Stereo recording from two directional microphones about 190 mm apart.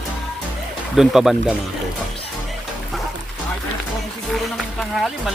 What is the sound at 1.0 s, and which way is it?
Speech, centre (ahead or behind).